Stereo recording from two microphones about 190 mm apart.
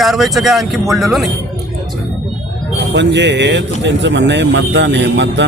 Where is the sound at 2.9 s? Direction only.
65° right (ahead or behind).